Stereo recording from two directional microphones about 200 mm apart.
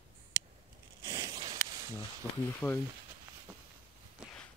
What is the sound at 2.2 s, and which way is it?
Speech, 15° right (ahead or behind).